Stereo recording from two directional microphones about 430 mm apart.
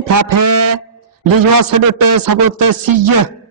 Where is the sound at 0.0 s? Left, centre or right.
Right.